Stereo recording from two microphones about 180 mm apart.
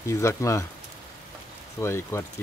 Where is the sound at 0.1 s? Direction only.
15° left (ahead or behind).